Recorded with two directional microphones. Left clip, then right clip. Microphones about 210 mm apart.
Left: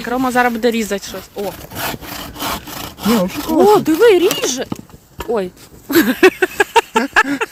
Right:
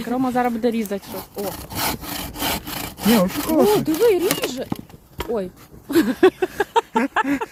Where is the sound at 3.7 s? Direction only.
25° left (ahead or behind).